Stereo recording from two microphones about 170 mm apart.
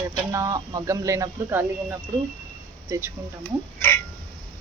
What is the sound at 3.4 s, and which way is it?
Speech, 10° left (ahead or behind).